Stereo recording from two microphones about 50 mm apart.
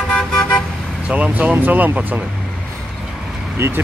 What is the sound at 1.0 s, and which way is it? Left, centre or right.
Speech, right.